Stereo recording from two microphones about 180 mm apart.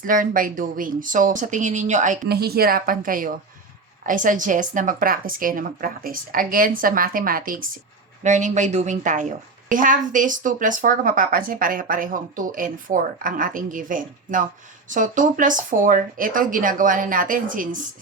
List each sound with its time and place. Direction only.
0.0 s speech: 50° right (ahead or behind)
2.3 s speech: 60° right (ahead or behind)